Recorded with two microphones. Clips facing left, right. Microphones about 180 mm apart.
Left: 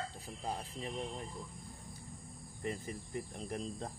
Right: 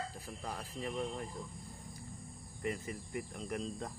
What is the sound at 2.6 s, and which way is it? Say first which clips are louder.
Speech: right 1 dB; 30° left (ahead or behind).